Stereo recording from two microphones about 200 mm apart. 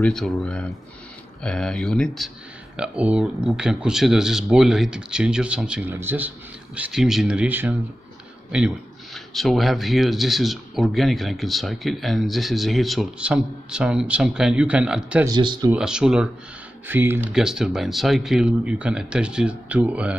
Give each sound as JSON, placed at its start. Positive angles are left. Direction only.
{"t": 0.0, "sound": "speech", "side_deg": 0}
{"t": 15.2, "sound": "speech", "side_deg": -20}
{"t": 15.7, "sound": "speech", "side_deg": -5}